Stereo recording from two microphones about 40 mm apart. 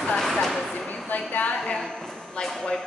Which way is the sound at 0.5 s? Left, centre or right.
Centre.